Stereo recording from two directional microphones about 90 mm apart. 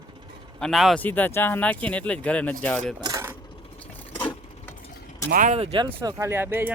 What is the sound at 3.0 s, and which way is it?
Mechanisms, 45° right (ahead or behind).